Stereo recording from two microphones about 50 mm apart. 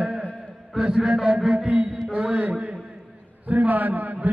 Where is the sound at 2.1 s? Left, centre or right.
Right.